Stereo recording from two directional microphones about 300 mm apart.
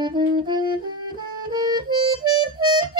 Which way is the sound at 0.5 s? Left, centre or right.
Centre.